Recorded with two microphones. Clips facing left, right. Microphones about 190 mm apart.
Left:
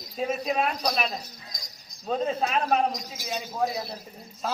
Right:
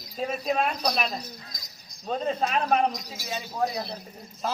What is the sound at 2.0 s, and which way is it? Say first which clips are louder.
Speech: left 1 dB; centre (ahead or behind).